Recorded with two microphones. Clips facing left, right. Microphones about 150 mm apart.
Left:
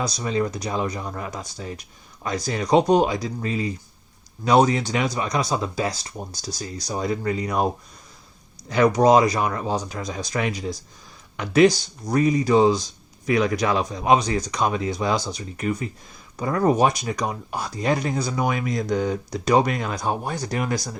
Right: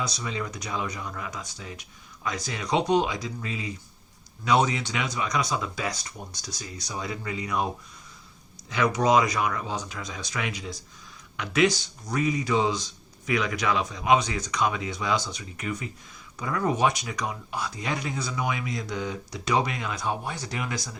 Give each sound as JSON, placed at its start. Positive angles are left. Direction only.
{"t": 0.0, "sound": "speech", "side_deg": 40}
{"t": 8.7, "sound": "speech", "side_deg": 40}